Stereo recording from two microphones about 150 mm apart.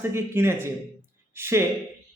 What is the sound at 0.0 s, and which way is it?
A man's voice, 15° right (ahead or behind).